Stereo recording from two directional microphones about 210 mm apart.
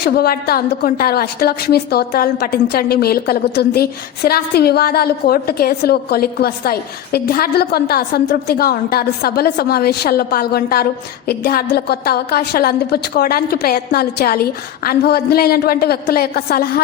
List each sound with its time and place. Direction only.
0.0 s a woman's voice: 50° left (ahead or behind)